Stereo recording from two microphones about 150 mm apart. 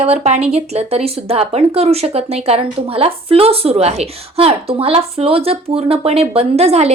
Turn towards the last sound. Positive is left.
turn(degrees=-45)  # may be behind; listen again after turning